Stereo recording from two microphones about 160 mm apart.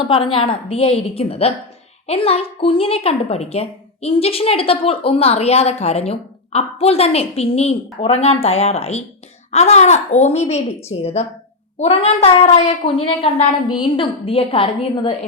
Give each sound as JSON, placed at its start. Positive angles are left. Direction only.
{"t": 0.1, "sound": "a woman's voice", "side_deg": 35}